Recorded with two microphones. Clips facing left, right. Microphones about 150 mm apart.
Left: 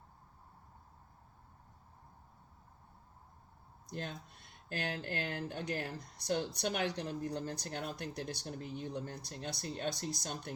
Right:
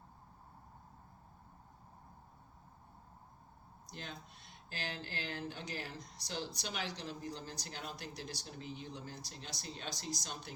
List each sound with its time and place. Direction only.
3.8 s speech: 55° left (ahead or behind)